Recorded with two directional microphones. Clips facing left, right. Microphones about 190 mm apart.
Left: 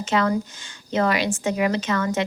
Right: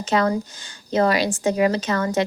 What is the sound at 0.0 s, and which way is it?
Speech, 40° right (ahead or behind).